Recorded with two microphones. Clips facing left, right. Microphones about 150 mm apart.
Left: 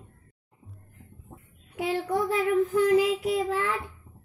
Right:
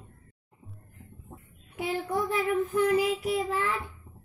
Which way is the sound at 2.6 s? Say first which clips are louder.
Left 3 dB; 90° left.